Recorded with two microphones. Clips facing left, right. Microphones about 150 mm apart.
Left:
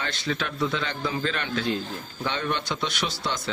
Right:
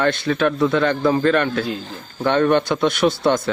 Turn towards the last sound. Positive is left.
turn(degrees=-55)  # may be behind; listen again after turning